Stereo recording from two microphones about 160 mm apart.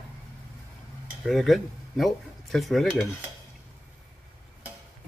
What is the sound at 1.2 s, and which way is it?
Speech, centre (ahead or behind).